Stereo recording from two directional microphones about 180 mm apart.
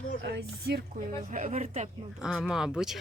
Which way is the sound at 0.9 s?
45° right (ahead or behind).